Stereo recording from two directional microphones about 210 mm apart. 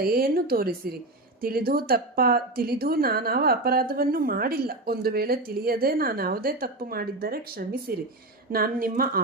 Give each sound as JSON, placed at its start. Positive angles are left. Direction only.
{"t": 0.0, "sound": "a woman's voice", "side_deg": -45}